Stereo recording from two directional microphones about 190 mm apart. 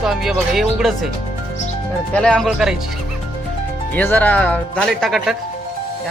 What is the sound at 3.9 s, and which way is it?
Speech, 10° left (ahead or behind).